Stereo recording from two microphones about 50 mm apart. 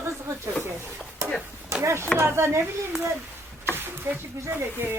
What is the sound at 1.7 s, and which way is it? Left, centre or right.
Chop, right.